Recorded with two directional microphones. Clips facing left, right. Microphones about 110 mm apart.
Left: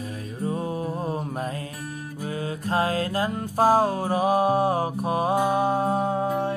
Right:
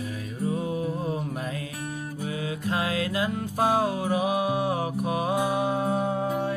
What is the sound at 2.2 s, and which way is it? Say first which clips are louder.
Music: left 1 dB; 40° left (ahead or behind).